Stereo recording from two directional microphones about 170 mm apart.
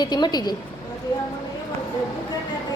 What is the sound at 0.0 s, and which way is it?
Speech, 25° left (ahead or behind).